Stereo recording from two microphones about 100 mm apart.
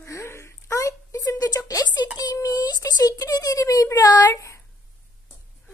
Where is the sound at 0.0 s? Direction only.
25° left (ahead or behind).